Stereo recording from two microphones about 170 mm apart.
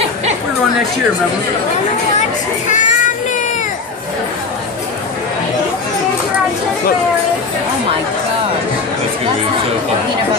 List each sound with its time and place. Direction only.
2.7 s music: 45° left (ahead or behind)